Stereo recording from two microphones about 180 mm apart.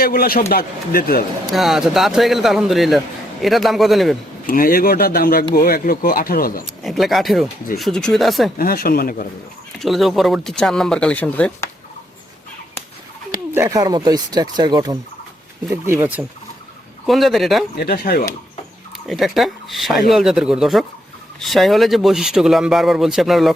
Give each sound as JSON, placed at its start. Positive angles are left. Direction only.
{"t": 0.0, "sound": "speech", "side_deg": 55}
{"t": 1.5, "sound": "speech", "side_deg": 0}
{"t": 4.4, "sound": "speech", "side_deg": 50}
{"t": 6.7, "sound": "speech", "side_deg": 0}
{"t": 8.5, "sound": "speech", "side_deg": 55}
{"t": 9.8, "sound": "speech", "side_deg": 0}
{"t": 13.5, "sound": "speech", "side_deg": -15}
{"t": 15.7, "sound": "speech", "side_deg": -15}
{"t": 17.1, "sound": "speech", "side_deg": 0}
{"t": 17.7, "sound": "speech", "side_deg": 55}
{"t": 19.0, "sound": "speech", "side_deg": 0}